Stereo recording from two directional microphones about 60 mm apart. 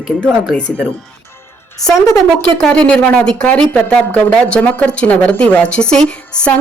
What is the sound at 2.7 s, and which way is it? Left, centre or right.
A woman's voice, centre.